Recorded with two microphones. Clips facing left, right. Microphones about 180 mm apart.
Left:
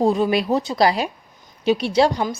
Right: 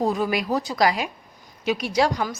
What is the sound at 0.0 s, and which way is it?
A woman's voice, 25° left (ahead or behind).